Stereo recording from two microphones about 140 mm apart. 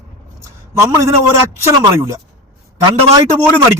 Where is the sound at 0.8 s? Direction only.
20° right (ahead or behind).